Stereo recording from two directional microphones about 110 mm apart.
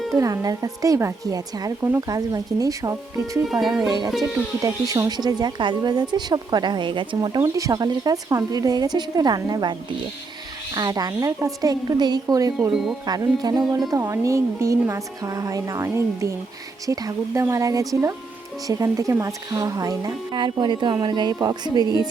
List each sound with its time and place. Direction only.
0.2 s a woman's voice: 30° right (ahead or behind)
3.4 s speech: centre (ahead or behind)
3.8 s a woman's voice: 35° right (ahead or behind)
7.4 s a woman's voice: 30° right (ahead or behind)
10.8 s a woman's voice: 35° right (ahead or behind)
12.7 s speech: 5° right (ahead or behind)
13.1 s a woman's voice: 40° right (ahead or behind)
13.9 s a woman's voice: 30° right (ahead or behind)
20.3 s a woman's voice: 45° right (ahead or behind)